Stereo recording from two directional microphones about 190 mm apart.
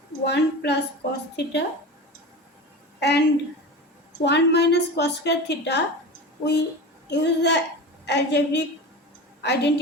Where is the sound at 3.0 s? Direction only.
65° left (ahead or behind).